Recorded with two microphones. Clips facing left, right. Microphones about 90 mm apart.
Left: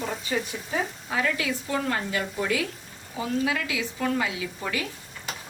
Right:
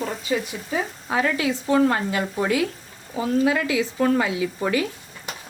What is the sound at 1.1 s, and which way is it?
Speech, 35° right (ahead or behind).